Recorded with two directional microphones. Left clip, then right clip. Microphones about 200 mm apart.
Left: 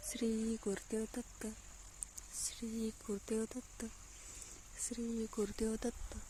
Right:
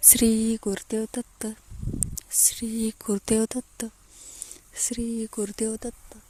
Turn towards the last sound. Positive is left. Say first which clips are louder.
# right 7 dB
turn(degrees=-25)  # may be behind; listen again after turning